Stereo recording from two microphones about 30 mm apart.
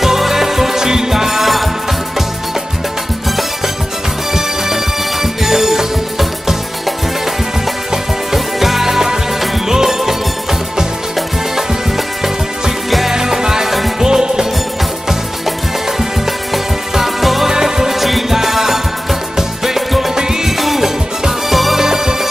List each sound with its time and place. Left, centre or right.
0.0 s music: centre
4.3 s music: centre
7.9 s music: centre
13.1 s music: centre
16.9 s music: centre
17.5 s music: centre
20.5 s music: centre
21.7 s music: centre